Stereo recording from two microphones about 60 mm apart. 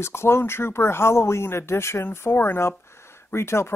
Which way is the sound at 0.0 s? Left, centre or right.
Left.